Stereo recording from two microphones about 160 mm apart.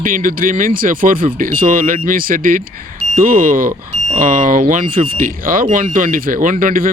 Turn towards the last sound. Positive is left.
turn(degrees=-60)  # may be behind; listen again after turning